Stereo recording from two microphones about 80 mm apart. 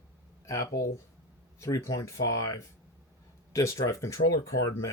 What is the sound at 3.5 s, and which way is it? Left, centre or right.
Speech, left.